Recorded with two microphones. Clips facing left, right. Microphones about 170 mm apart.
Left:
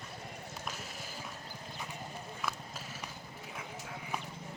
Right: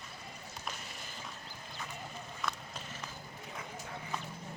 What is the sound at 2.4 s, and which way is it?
Clip-clop, 5° left (ahead or behind).